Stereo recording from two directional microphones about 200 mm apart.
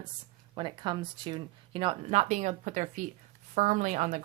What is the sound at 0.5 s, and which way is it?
Speech, 25° right (ahead or behind).